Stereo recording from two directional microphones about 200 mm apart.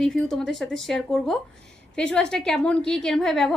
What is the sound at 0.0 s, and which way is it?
A woman's voice, centre (ahead or behind).